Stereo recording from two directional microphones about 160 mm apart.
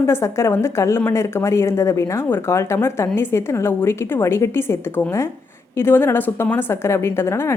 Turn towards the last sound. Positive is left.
turn(degrees=15)  # may be behind; listen again after turning